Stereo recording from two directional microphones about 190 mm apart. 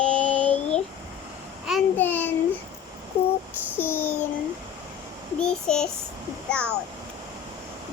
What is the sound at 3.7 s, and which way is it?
Child singing, 10° left (ahead or behind).